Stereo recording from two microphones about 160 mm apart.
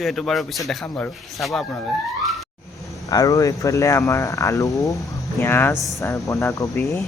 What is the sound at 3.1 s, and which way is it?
Speech, 20° left (ahead or behind).